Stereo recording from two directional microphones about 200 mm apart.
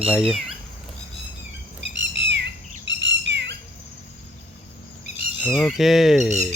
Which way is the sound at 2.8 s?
65° right (ahead or behind).